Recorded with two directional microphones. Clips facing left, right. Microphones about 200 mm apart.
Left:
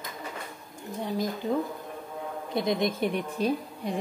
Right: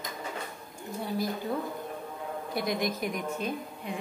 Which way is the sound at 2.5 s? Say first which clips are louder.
Left 4 dB; 25° left (ahead or behind).